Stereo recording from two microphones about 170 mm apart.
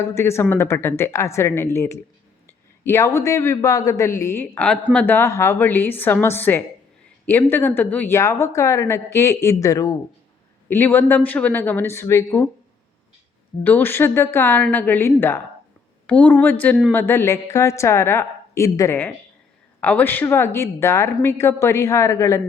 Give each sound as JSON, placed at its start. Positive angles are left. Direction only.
{"t": 0.0, "sound": "a woman's voice", "side_deg": 15}
{"t": 13.7, "sound": "a woman's voice", "side_deg": 10}